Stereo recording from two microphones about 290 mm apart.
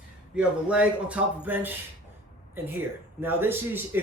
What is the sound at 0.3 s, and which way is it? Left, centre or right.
Speech, centre.